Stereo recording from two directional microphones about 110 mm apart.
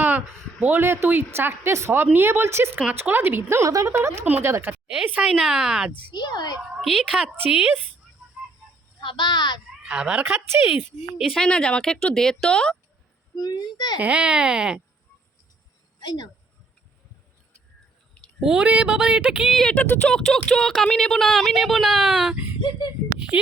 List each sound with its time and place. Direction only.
0.6 s a woman's voice: 20° right (ahead or behind)
4.9 s speech: 10° right (ahead or behind)
6.1 s a woman's voice: 40° left (ahead or behind)
6.6 s speech: 5° right (ahead or behind)
9.0 s speech: 45° left (ahead or behind)
9.8 s speech: 5° right (ahead or behind)
11.2 s a woman's voice: 5° left (ahead or behind)
13.3 s a woman's voice: 40° left (ahead or behind)
14.0 s speech: 10° right (ahead or behind)
16.0 s insect: 40° left (ahead or behind)
18.3 s speech: 5° right (ahead or behind)
19.7 s speech: 10° left (ahead or behind); by 22.4 s 5° right (ahead or behind)